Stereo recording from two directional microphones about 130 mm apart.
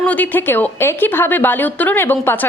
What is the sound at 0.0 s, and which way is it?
A woman's voice, 10° left (ahead or behind).